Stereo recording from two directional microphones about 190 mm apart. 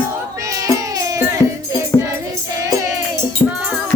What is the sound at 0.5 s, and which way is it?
Music, 20° right (ahead or behind).